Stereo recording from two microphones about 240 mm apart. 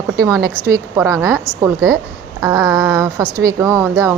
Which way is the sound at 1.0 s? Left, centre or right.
Centre.